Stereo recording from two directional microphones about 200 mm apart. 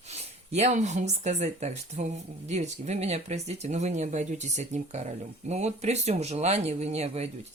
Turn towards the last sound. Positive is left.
turn(degrees=-30)  # may be behind; listen again after turning